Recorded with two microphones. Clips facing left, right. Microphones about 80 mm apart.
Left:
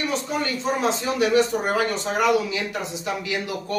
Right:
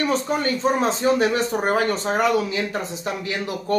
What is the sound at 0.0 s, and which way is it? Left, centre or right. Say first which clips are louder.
Speech: right 4 dB; right.